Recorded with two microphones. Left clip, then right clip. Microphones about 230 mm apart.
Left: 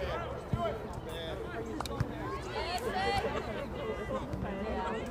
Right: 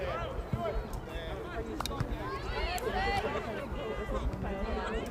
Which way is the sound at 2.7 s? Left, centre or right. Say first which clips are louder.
Even; left.